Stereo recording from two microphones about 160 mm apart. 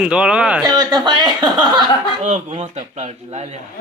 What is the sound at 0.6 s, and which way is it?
Speech, 25° right (ahead or behind).